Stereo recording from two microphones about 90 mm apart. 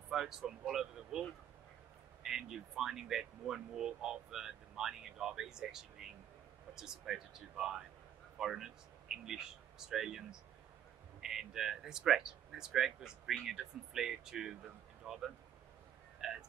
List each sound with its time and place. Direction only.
0.1 s speech: 5° right (ahead or behind)
2.2 s speech: 5° right (ahead or behind)
11.2 s speech: 5° right (ahead or behind)